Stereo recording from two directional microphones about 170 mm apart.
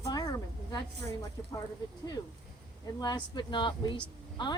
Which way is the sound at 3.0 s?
25° left (ahead or behind).